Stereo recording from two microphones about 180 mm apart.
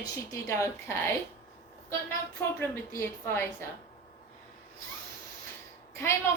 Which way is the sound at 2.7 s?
15° left (ahead or behind).